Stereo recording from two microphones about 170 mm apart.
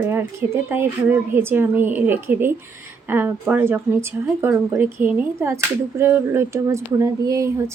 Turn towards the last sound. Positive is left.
turn(degrees=-20)  # may be behind; listen again after turning